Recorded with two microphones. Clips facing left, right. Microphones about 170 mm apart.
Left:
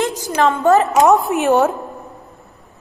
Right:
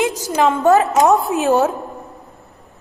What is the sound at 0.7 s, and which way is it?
A woman's voice, centre (ahead or behind).